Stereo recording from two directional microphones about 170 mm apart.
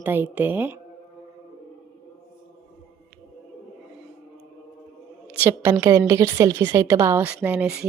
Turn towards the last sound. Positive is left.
turn(degrees=-5)  # may be behind; listen again after turning